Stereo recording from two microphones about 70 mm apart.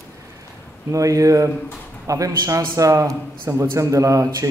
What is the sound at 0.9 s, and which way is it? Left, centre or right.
A man's voice, right.